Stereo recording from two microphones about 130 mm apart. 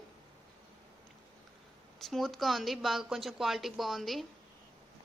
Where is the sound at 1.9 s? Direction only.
Centre (ahead or behind).